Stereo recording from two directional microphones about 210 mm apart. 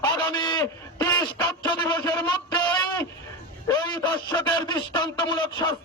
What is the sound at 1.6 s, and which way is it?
Speech, 20° left (ahead or behind).